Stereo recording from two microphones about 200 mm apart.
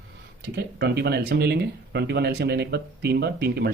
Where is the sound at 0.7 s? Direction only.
55° right (ahead or behind).